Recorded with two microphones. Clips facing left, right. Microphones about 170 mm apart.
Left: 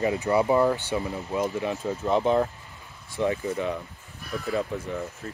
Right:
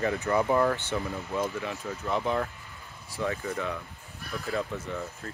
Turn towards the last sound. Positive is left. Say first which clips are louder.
# left 3 dB
turn(degrees=15)  # may be behind; listen again after turning